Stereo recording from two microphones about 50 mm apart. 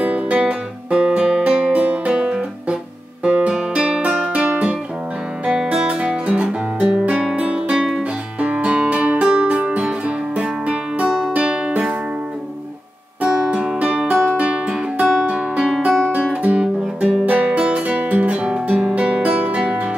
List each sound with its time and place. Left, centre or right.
0.0 s music: right
6.8 s guitar: centre
7.4 s music: centre
8.4 s music: right
13.5 s music: right
17.5 s guitar: right